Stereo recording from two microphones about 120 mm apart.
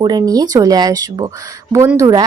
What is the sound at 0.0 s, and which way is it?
A woman's voice, 35° right (ahead or behind).